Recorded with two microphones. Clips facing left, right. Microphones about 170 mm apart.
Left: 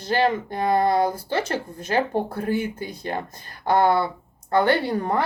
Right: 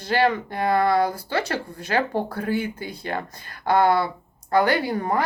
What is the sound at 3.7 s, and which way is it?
Speech, 20° left (ahead or behind).